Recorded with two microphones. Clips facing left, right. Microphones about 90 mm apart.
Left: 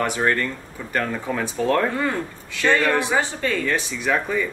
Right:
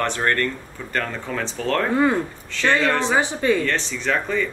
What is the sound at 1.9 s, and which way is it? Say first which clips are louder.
Speech: right 6 dB; 20° right (ahead or behind).